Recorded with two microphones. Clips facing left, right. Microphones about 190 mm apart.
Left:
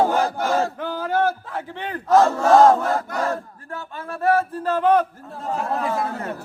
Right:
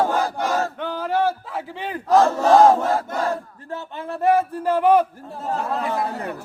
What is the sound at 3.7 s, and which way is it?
Speech, 20° right (ahead or behind).